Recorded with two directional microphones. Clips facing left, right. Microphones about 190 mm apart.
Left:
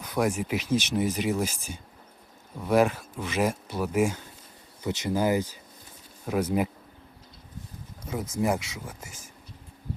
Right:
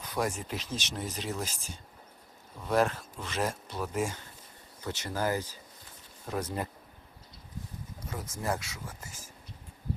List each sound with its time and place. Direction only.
0.0 s speech: 10° left (ahead or behind)
8.1 s speech: 15° left (ahead or behind)